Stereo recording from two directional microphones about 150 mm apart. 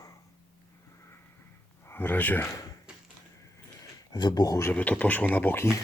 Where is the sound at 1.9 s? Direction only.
15° left (ahead or behind).